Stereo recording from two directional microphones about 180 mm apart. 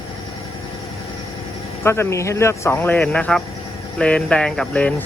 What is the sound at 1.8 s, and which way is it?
Speech, 15° left (ahead or behind).